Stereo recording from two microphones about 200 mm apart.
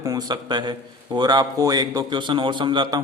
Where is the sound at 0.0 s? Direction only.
15° right (ahead or behind).